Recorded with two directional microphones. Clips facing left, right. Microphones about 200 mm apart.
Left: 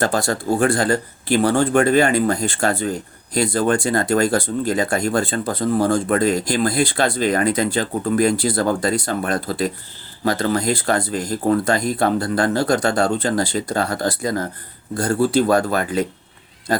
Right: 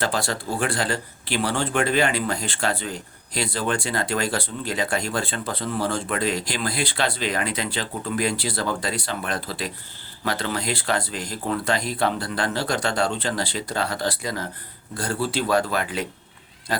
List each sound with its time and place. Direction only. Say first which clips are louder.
0.0 s speech: left 6 dB; 45° left (ahead or behind)